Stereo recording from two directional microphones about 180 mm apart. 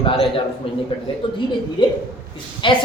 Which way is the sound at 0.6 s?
30° left (ahead or behind).